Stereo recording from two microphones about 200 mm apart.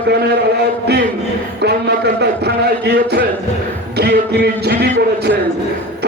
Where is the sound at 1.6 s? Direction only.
55° right (ahead or behind).